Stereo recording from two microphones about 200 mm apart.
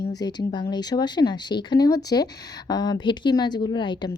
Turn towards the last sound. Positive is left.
turn(degrees=25)  # may be behind; listen again after turning